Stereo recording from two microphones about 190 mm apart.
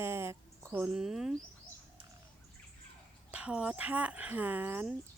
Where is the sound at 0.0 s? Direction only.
15° right (ahead or behind).